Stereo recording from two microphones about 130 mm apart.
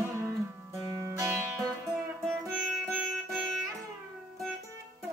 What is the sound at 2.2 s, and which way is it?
Music, centre (ahead or behind).